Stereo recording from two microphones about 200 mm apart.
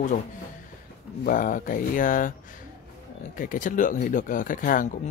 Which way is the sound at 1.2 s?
40° left (ahead or behind).